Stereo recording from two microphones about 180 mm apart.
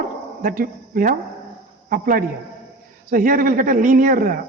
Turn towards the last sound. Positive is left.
turn(degrees=-50)  # may be behind; listen again after turning